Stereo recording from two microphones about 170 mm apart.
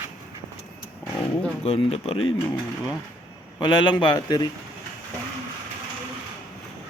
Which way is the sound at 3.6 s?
25° left (ahead or behind).